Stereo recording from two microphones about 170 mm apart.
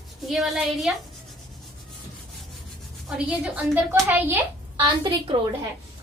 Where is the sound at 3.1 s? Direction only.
5° right (ahead or behind).